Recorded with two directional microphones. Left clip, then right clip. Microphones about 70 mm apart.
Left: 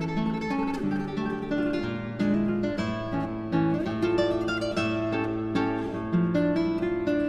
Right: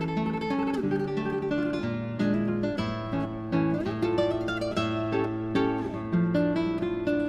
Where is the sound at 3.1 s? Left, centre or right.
Centre.